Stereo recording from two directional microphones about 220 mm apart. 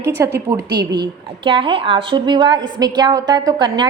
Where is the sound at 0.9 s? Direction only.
20° right (ahead or behind).